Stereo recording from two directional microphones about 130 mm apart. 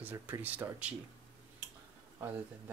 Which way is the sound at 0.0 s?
15° right (ahead or behind).